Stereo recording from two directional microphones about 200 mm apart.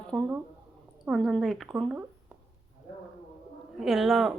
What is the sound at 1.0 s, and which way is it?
Speech, centre (ahead or behind).